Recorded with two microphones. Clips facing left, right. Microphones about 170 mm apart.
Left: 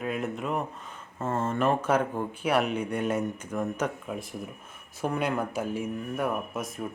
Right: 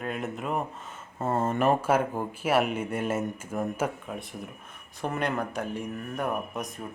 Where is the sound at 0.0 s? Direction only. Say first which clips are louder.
Left 2 dB; centre (ahead or behind).